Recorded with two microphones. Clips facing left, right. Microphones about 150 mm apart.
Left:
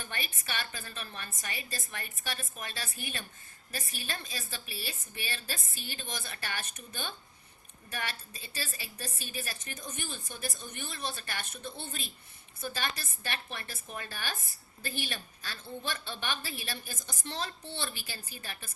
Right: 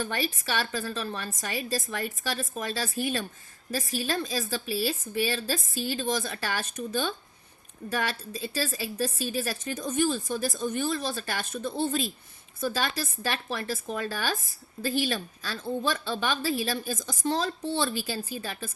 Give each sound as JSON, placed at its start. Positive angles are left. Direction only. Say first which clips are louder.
{"t": 0.0, "sound": "speech", "louder": "right 11 dB", "side_deg": -90}